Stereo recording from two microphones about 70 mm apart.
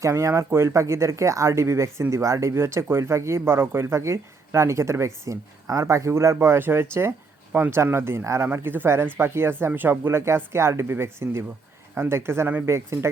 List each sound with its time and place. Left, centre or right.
0.0 s speech: right
8.5 s speech: right